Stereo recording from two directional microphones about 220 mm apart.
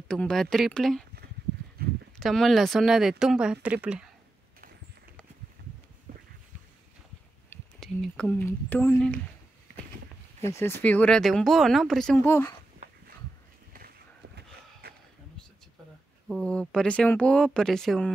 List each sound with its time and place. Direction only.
0.1 s speech: 5° left (ahead or behind)
2.1 s speech: centre (ahead or behind)
7.4 s speech: 5° left (ahead or behind)
10.5 s speech: 10° left (ahead or behind)
13.7 s a sound: 45° right (ahead or behind)
16.3 s speech: 5° left (ahead or behind)